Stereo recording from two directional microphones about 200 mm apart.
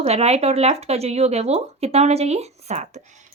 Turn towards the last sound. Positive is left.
turn(degrees=-35)  # may be behind; listen again after turning